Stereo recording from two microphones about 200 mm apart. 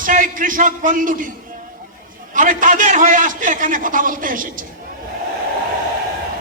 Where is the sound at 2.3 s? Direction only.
40° right (ahead or behind).